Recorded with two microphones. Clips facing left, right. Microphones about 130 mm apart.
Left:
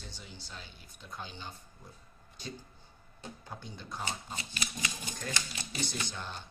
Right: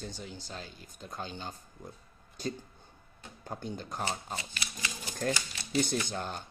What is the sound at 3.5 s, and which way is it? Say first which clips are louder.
Speech: right 8 dB; 45° right (ahead or behind).